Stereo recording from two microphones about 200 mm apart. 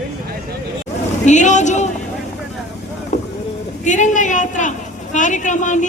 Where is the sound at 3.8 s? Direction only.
40° left (ahead or behind).